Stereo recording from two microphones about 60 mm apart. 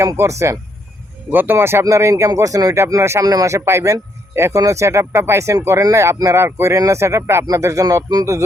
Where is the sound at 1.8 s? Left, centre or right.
Right.